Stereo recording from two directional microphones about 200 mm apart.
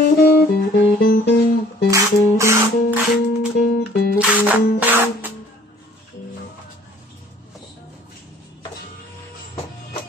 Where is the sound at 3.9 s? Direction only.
50° left (ahead or behind).